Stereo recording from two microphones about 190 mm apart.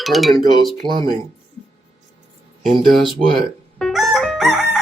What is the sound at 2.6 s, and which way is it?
Music, centre (ahead or behind).